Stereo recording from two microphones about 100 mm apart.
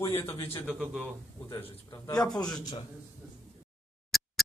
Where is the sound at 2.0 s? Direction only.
40° left (ahead or behind).